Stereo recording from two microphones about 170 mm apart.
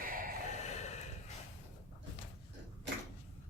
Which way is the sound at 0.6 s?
40° left (ahead or behind).